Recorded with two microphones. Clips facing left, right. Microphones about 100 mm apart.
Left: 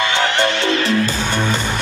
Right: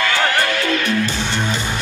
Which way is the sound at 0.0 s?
25° left (ahead or behind).